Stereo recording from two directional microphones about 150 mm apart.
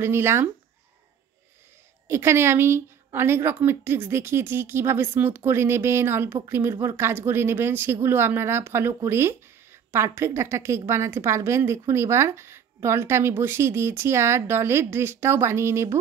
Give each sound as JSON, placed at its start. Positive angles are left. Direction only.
{"t": 0.0, "sound": "speech", "side_deg": -15}
{"t": 2.0, "sound": "speech", "side_deg": -15}